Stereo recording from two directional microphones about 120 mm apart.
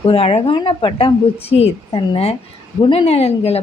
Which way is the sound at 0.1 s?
55° left (ahead or behind).